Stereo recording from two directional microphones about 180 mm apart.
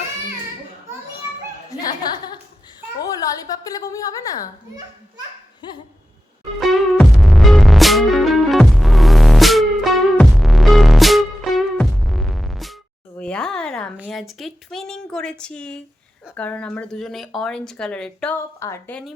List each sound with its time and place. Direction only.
1.7 s a woman's voice: 20° left (ahead or behind)
5.6 s a woman's voice: 25° left (ahead or behind)
6.6 s music: centre (ahead or behind)
13.1 s a sound: 5° left (ahead or behind)
14.1 s speech: centre (ahead or behind)